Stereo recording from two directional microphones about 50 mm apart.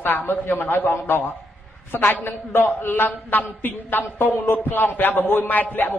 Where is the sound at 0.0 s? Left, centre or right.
Left.